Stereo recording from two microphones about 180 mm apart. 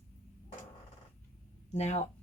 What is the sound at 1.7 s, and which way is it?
Speech, 40° left (ahead or behind).